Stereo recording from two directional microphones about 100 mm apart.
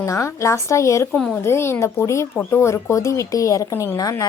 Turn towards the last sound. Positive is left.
turn(degrees=35)  # may be behind; listen again after turning